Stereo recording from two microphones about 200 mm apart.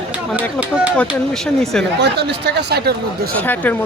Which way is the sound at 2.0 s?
55° right (ahead or behind).